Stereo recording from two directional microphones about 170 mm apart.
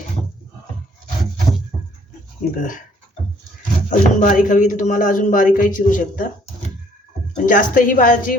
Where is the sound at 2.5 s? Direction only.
50° left (ahead or behind).